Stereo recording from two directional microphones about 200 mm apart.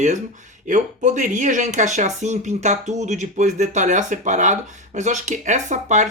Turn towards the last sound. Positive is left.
turn(degrees=-35)  # may be behind; listen again after turning